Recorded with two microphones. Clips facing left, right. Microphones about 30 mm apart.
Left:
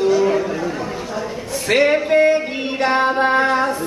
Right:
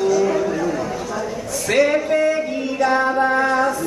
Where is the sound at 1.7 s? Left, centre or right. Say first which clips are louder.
Left 2 dB; left.